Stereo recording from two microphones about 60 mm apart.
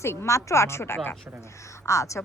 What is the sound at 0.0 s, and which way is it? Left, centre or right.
Speech, left.